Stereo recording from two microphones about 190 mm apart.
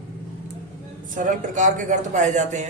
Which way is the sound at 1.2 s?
40° right (ahead or behind).